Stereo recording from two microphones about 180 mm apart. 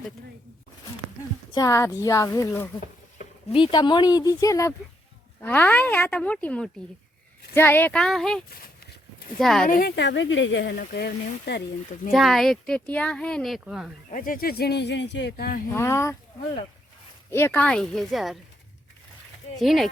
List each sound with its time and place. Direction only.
1.5 s speech: 20° left (ahead or behind)
3.5 s speech: 25° left (ahead or behind); by 9.6 s centre (ahead or behind)
9.6 s speech: 55° left (ahead or behind)
9.9 s speech: 75° left (ahead or behind)
10.8 s speech: 65° left (ahead or behind)
12.1 s speech: centre (ahead or behind)
14.1 s speech: 50° left (ahead or behind)
15.7 s speech: 15° left (ahead or behind)
17.3 s speech: 10° left (ahead or behind)
19.5 s speech: centre (ahead or behind)